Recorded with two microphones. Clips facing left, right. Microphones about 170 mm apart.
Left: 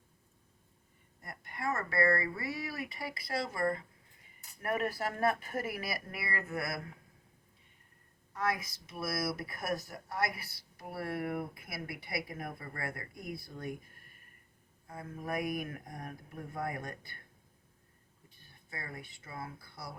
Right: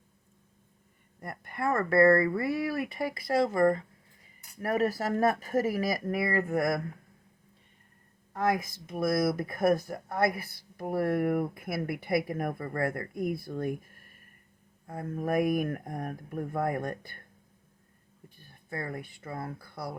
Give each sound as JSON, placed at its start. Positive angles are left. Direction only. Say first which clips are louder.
{"t": 1.2, "sound": "speech", "louder": "right 6 dB", "side_deg": -55}
{"t": 8.4, "sound": "speech", "louder": "right 7 dB", "side_deg": -45}
{"t": 18.7, "sound": "speech", "louder": "right 9 dB", "side_deg": -50}